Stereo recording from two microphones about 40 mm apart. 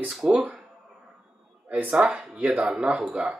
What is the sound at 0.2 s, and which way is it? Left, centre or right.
Speech, right.